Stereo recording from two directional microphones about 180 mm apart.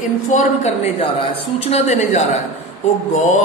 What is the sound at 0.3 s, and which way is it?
A woman's voice, 40° left (ahead or behind).